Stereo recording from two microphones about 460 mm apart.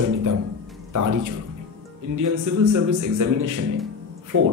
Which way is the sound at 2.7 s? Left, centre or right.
Right.